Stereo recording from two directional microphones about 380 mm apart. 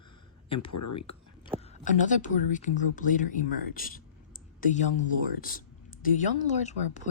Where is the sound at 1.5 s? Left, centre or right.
Centre.